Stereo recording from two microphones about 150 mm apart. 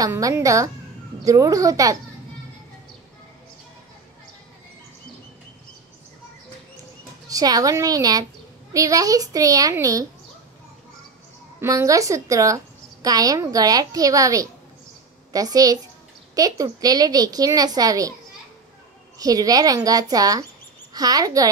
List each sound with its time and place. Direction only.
0.0 s a woman's voice: 20° right (ahead or behind)
7.2 s a woman's voice: 25° right (ahead or behind)
11.6 s a woman's voice: 20° right (ahead or behind)
19.1 s a woman's voice: 25° right (ahead or behind)